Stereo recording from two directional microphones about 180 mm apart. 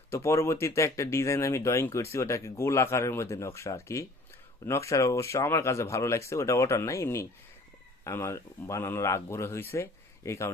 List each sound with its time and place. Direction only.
0.1 s speech: 15° left (ahead or behind)